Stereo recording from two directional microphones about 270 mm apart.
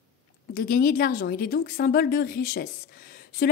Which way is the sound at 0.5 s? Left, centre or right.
Left.